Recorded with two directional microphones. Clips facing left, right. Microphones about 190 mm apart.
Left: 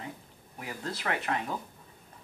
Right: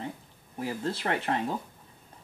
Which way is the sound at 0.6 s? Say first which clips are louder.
Right 6 dB; 30° right (ahead or behind).